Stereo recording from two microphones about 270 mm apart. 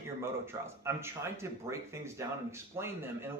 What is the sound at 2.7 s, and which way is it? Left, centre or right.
Speech, centre.